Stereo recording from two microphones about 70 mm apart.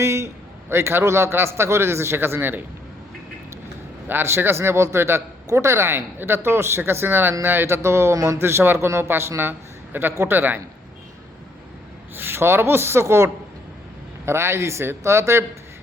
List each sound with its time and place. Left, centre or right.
0.0 s a man's voice: right
4.1 s speech: right
8.4 s speech: right
12.1 s speech: right